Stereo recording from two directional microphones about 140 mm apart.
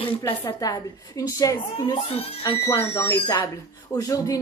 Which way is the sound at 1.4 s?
25° left (ahead or behind).